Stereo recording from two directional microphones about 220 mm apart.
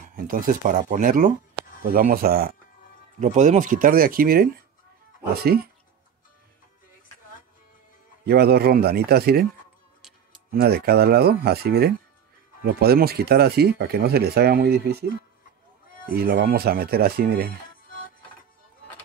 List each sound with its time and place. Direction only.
0.0 s speech: 40° right (ahead or behind)
8.3 s speech: 45° right (ahead or behind)
10.5 s speech: 45° right (ahead or behind)
16.2 s speech: 40° right (ahead or behind)
17.8 s music: 40° left (ahead or behind)